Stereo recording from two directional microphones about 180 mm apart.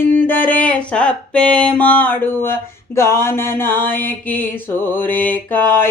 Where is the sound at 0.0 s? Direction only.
10° left (ahead or behind).